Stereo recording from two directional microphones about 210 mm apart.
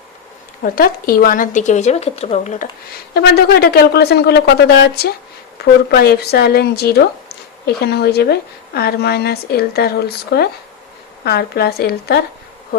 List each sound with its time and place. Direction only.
0.6 s speech: 45° left (ahead or behind)
3.2 s a woman's voice: 50° left (ahead or behind)